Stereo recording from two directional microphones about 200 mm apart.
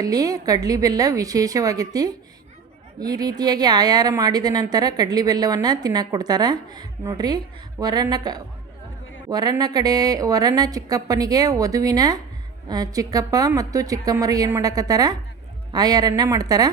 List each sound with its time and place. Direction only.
0.0 s a woman's voice: 20° right (ahead or behind)